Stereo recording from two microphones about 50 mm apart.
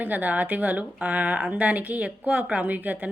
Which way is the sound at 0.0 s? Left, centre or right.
Right.